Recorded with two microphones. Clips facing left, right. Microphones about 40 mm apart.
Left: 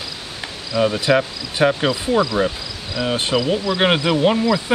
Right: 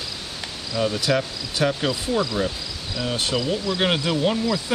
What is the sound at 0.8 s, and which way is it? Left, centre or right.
Speech, left.